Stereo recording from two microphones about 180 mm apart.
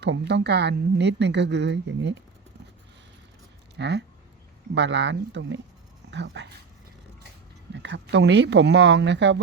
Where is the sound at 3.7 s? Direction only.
70° right (ahead or behind); by 5.6 s 85° right.